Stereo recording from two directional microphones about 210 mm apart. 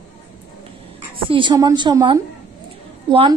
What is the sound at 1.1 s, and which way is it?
A woman's voice, 25° right (ahead or behind).